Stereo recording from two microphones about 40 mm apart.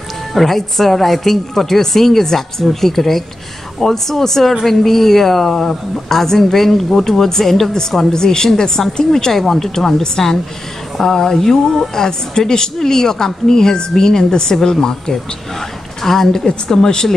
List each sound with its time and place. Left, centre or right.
0.3 s a woman's voice: centre
8.1 s a woman's voice: centre